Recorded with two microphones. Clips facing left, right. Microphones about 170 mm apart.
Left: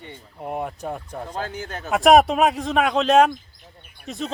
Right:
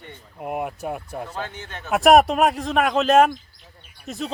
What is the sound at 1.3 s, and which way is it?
Speech, 35° left (ahead or behind).